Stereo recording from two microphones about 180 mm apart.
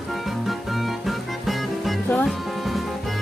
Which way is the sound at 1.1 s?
Centre (ahead or behind).